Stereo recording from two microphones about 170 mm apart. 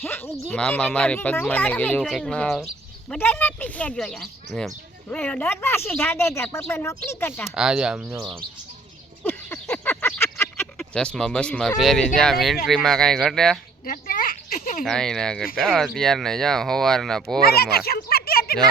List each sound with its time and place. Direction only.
0.0 s speech: 10° left (ahead or behind)
7.4 s speech: 5° right (ahead or behind)
9.2 s a sound: 10° left (ahead or behind)
10.8 s speech: 5° left (ahead or behind)
13.8 s speech: 55° left (ahead or behind)
14.8 s speech: 5° left (ahead or behind)
17.4 s speech: 65° left (ahead or behind)